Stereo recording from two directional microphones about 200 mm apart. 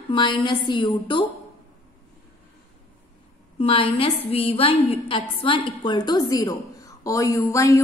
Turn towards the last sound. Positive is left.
turn(degrees=15)  # may be behind; listen again after turning